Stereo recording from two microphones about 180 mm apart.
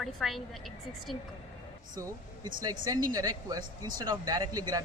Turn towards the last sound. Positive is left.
turn(degrees=-20)  # may be behind; listen again after turning